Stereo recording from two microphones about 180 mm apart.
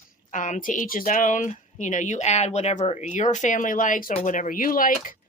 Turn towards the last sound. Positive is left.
turn(degrees=50)  # may be behind; listen again after turning